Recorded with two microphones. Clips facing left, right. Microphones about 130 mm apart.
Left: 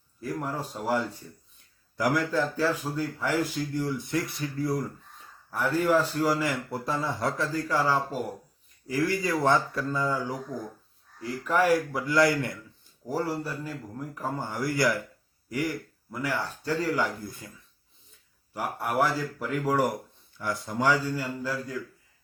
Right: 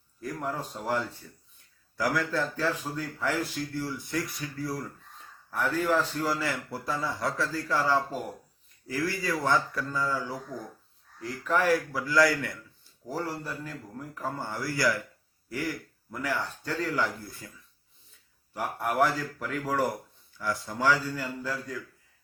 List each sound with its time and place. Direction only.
0.2 s a man's voice: 10° left (ahead or behind)
5.5 s a man's voice: 10° left (ahead or behind)
13.1 s a man's voice: 10° left (ahead or behind)
17.4 s speech: 25° left (ahead or behind)
18.9 s a man's voice: 10° left (ahead or behind)